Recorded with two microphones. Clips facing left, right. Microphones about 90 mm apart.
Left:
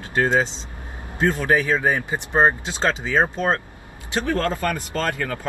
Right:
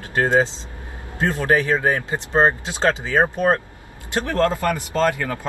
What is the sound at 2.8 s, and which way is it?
Speech, 15° right (ahead or behind).